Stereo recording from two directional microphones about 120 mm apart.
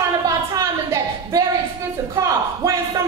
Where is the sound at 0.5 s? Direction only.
30° right (ahead or behind).